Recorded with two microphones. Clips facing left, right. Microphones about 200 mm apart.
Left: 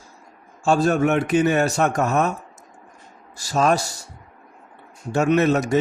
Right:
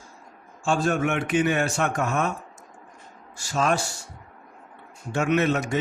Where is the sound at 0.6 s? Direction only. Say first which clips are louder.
Left 5 dB; 40° left (ahead or behind).